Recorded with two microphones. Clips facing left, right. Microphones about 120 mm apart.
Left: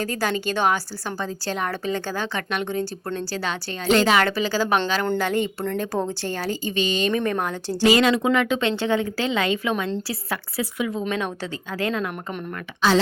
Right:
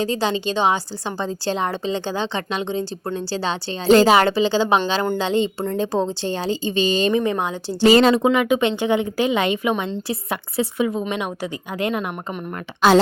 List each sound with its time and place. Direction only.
0.0 s a woman's voice: 25° right (ahead or behind)
7.1 s a woman's voice: 15° right (ahead or behind)
7.9 s a woman's voice: 30° right (ahead or behind)